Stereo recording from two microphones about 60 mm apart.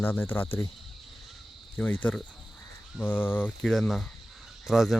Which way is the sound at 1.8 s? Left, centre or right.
Left.